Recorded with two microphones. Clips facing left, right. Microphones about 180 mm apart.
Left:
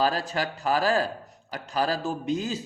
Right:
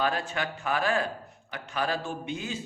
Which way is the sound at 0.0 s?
35° left (ahead or behind).